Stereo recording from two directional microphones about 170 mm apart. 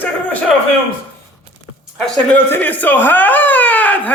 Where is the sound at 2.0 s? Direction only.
10° left (ahead or behind).